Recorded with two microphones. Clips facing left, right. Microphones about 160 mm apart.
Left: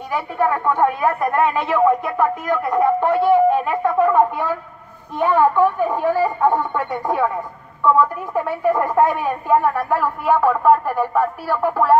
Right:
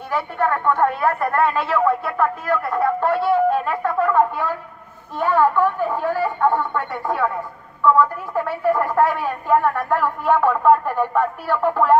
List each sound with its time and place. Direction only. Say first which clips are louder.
0.1 s a woman's voice: left 1 dB; 10° left (ahead or behind)